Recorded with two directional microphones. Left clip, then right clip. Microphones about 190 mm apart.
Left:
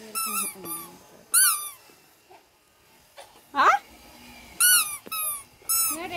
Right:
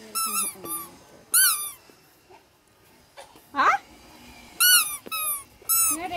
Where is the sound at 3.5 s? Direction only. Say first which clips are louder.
Left 1 dB; 40° left (ahead or behind).